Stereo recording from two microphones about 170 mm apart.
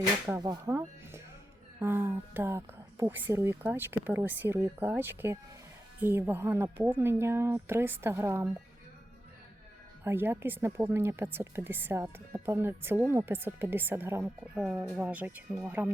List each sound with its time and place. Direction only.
0.3 s speech: 25° right (ahead or behind)
10.0 s speech: 15° right (ahead or behind)